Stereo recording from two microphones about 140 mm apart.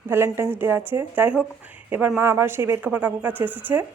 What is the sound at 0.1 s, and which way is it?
A woman's voice, 15° right (ahead or behind).